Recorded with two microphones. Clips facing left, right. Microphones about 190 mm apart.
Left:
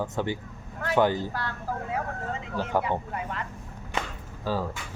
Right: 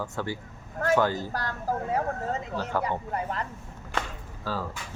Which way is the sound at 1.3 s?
40° right (ahead or behind).